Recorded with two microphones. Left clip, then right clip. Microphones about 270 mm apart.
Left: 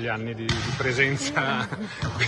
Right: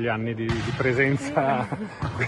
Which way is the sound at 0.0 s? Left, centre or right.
Right.